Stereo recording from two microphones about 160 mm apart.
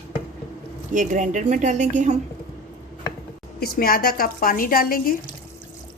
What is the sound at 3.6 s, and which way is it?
A woman's voice, 70° left (ahead or behind).